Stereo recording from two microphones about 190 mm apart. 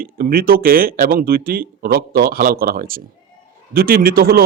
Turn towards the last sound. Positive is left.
turn(degrees=-50)  # may be behind; listen again after turning